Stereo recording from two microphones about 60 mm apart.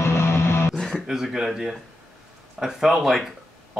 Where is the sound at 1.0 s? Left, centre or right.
Centre.